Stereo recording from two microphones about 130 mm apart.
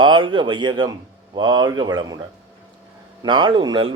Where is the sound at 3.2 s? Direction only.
35° right (ahead or behind).